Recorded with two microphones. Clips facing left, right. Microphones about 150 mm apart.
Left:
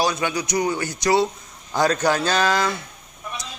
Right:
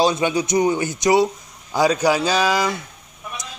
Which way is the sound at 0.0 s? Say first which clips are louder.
Right 4 dB; 25° right (ahead or behind).